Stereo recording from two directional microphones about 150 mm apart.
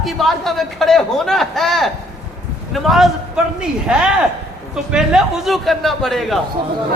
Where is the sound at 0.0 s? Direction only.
Centre (ahead or behind).